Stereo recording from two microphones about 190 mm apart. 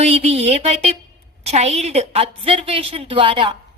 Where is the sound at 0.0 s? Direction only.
35° right (ahead or behind).